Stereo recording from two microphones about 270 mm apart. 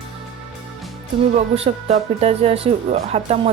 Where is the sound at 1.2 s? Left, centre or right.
Right.